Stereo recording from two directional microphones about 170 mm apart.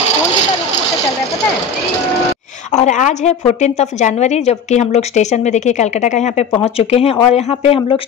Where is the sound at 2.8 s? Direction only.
45° left (ahead or behind).